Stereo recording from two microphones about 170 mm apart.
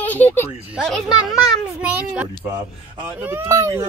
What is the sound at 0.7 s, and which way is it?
A child's voice, centre (ahead or behind).